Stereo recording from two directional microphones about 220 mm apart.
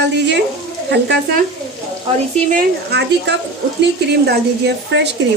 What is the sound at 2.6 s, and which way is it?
Speech, 50° right (ahead or behind).